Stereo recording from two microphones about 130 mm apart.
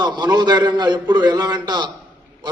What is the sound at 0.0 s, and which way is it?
A man's voice, 35° right (ahead or behind).